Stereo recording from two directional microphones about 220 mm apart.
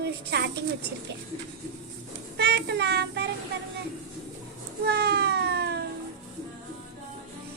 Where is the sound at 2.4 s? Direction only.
50° right (ahead or behind).